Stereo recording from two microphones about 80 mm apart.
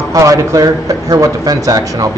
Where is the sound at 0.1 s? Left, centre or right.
Right.